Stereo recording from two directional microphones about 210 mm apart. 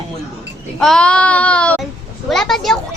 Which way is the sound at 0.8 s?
5° left (ahead or behind).